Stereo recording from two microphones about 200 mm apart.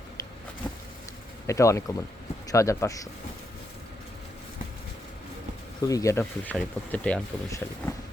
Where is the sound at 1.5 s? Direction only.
15° left (ahead or behind).